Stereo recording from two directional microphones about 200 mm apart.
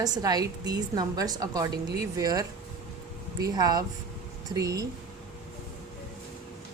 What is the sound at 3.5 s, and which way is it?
A woman's voice, 20° right (ahead or behind).